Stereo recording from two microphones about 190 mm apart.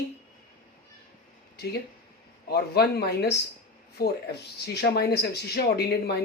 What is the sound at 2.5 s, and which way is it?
Speech, 55° left (ahead or behind).